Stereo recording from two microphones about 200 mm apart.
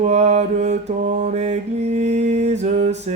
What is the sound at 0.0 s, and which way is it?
Mantra, 35° right (ahead or behind).